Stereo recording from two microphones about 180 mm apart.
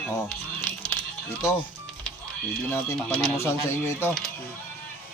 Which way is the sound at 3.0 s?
5° left (ahead or behind).